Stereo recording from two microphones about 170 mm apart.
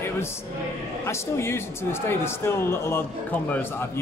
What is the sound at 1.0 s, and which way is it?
A man's voice, 15° left (ahead or behind).